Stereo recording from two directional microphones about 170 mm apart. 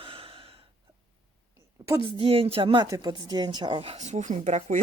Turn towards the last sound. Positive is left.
turn(degrees=-40)  # may be behind; listen again after turning